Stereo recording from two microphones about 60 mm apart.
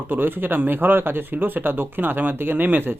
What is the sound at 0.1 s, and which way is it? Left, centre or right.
Speech, right.